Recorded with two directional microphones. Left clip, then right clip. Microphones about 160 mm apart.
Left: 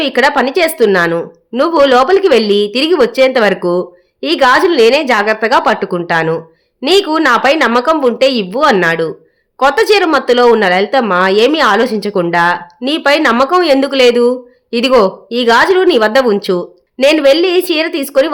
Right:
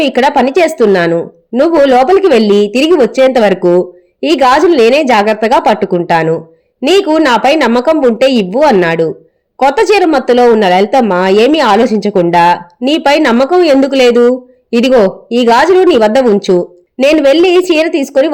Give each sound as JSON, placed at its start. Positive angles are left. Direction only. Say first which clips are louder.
{"t": 0.0, "sound": "speech", "louder": "right 2 dB", "side_deg": -15}